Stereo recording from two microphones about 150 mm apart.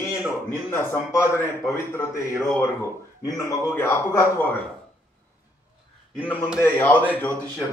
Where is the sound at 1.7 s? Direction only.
15° left (ahead or behind).